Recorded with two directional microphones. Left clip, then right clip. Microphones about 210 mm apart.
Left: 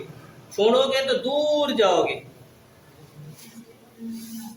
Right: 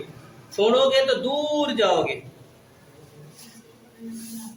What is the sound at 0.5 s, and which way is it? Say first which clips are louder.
A man's voice: right 1 dB; 5° right (ahead or behind).